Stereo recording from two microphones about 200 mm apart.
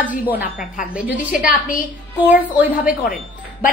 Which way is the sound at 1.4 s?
45° left (ahead or behind).